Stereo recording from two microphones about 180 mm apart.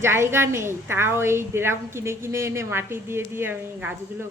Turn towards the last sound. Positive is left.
turn(degrees=-10)  # may be behind; listen again after turning